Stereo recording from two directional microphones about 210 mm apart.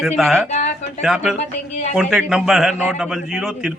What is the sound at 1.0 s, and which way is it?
Speech, 5° right (ahead or behind).